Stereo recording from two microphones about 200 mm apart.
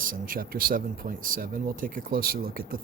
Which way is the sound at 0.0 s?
45° right (ahead or behind).